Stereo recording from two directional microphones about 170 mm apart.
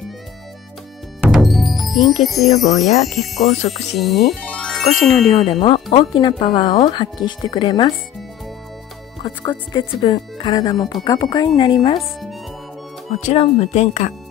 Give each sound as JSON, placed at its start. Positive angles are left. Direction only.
{"t": 1.2, "sound": "music", "side_deg": 0}
{"t": 3.1, "sound": "wind chime", "side_deg": 0}
{"t": 3.5, "sound": "speech", "side_deg": 40}
{"t": 3.9, "sound": "speech", "side_deg": 0}
{"t": 4.9, "sound": "wind chime", "side_deg": 0}
{"t": 5.3, "sound": "speech", "side_deg": 35}
{"t": 9.2, "sound": "speech", "side_deg": 25}
{"t": 13.2, "sound": "speech", "side_deg": 40}